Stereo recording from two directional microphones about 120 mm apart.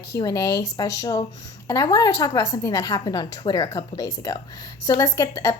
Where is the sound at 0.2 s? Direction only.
30° left (ahead or behind).